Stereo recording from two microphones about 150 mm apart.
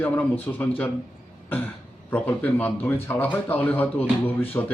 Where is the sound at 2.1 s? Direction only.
10° left (ahead or behind).